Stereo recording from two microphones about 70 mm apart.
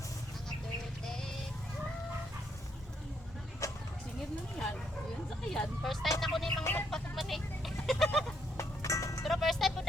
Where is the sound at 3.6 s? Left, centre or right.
Left.